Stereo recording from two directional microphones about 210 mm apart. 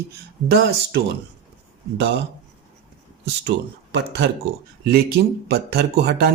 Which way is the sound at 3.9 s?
55° right (ahead or behind).